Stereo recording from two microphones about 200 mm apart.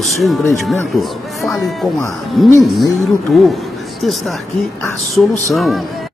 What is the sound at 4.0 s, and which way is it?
Speech, centre (ahead or behind).